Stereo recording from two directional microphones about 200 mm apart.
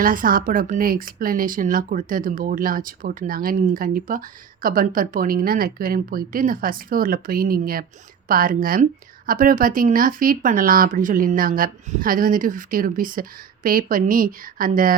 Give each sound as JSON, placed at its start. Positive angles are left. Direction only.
{"t": 0.0, "sound": "speech", "side_deg": -45}